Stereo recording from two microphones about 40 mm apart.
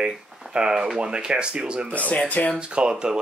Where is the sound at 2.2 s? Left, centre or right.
Left.